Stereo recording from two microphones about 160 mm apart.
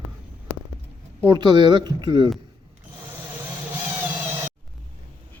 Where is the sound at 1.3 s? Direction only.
30° right (ahead or behind).